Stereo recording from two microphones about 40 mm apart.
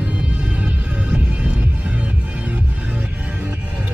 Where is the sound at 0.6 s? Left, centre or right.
Right.